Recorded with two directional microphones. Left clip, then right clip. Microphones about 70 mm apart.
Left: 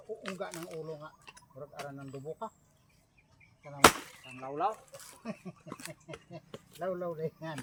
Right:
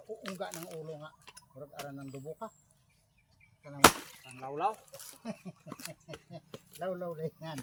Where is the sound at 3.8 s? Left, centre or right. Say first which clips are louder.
Left 1 dB; right.